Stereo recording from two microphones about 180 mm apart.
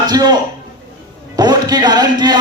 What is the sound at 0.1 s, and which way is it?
Speech, 20° right (ahead or behind).